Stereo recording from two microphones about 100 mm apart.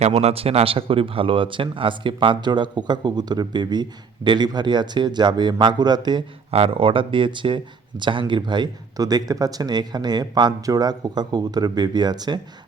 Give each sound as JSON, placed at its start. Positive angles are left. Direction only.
{"t": 0.0, "sound": "speech", "side_deg": -90}
{"t": 6.5, "sound": "speech", "side_deg": -80}